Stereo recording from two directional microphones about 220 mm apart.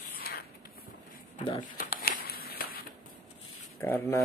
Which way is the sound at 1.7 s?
40° left (ahead or behind).